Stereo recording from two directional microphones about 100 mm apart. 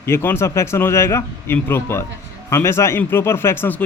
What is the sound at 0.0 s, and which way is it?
Speech, 25° left (ahead or behind).